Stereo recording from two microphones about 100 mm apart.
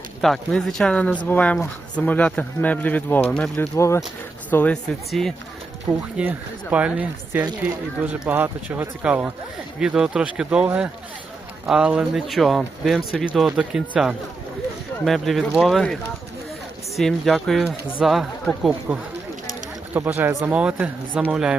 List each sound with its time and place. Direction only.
0.2 s speech: 5° left (ahead or behind)
3.6 s speech: 30° left (ahead or behind)
4.7 s speech: 5° left (ahead or behind)
6.1 s speech: 15° right (ahead or behind)
10.7 s speech: 20° right (ahead or behind); by 16.0 s centre (ahead or behind)
17.0 s speech: 5° left (ahead or behind)
18.9 s speech: 15° right (ahead or behind)